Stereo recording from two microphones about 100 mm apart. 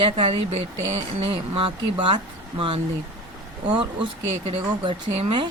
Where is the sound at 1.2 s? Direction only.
65° right (ahead or behind).